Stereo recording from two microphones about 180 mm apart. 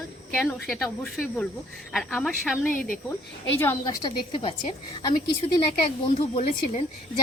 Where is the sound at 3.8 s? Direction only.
25° left (ahead or behind).